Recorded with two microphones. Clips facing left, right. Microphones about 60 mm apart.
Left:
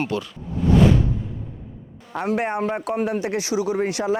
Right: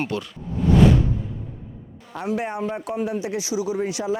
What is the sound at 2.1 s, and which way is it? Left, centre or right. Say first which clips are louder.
Speech: left 3 dB; left.